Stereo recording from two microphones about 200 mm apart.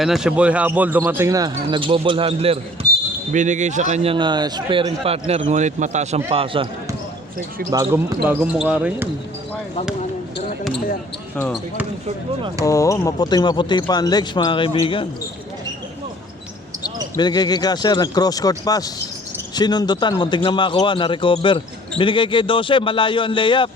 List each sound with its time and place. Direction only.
0.0 s a man's voice: centre (ahead or behind); by 6.7 s 25° right (ahead or behind)
7.7 s speech: 15° right (ahead or behind)
12.6 s a man's voice: 15° left (ahead or behind)
17.2 s a man's voice: 20° left (ahead or behind)